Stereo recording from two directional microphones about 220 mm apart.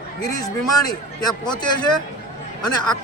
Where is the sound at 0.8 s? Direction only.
20° left (ahead or behind).